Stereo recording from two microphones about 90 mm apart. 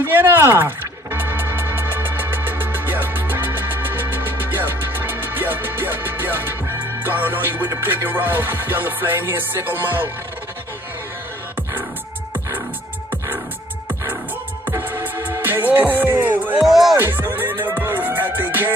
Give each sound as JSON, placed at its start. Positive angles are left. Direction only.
{"t": 0.0, "sound": "music", "side_deg": -25}
{"t": 14.7, "sound": "music", "side_deg": -25}
{"t": 16.2, "sound": "a sound", "side_deg": -20}
{"t": 16.5, "sound": "music", "side_deg": 0}
{"t": 17.0, "sound": "music", "side_deg": -25}